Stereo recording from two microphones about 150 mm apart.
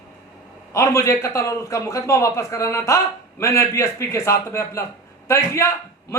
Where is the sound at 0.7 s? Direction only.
20° left (ahead or behind).